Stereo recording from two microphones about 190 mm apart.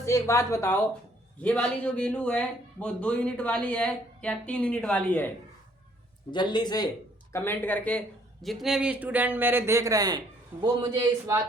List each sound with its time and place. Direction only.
0.0 s a man's voice: 15° left (ahead or behind)
6.3 s speech: 25° left (ahead or behind)
7.3 s a man's voice: 10° left (ahead or behind); by 11.3 s 25° right (ahead or behind)